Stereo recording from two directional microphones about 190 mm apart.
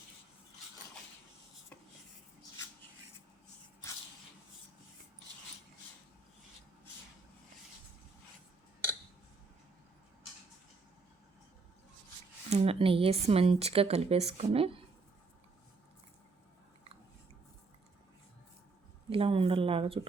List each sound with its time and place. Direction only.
12.5 s speech: 30° right (ahead or behind)
19.1 s speech: 30° right (ahead or behind)